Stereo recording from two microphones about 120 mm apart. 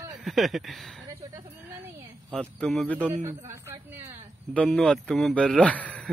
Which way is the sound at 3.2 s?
20° right (ahead or behind).